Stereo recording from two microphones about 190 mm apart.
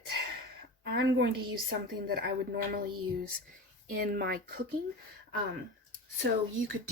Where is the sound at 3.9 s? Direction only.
50° right (ahead or behind).